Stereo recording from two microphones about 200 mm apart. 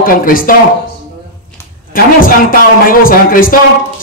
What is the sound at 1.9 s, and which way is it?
Speech, 45° left (ahead or behind).